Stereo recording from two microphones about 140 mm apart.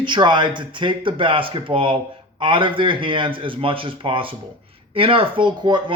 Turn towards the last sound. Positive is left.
turn(degrees=-35)  # may be behind; listen again after turning